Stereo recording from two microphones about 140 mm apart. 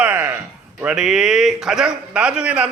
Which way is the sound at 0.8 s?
5° right (ahead or behind).